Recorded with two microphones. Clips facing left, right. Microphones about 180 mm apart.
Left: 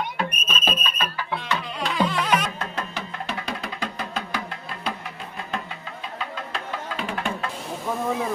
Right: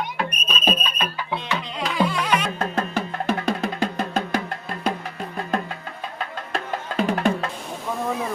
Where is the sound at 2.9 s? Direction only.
50° right (ahead or behind).